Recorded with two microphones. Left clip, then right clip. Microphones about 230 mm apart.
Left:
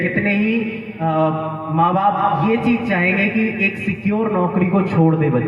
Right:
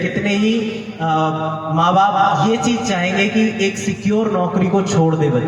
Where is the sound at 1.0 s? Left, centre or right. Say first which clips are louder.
Right 1 dB; right.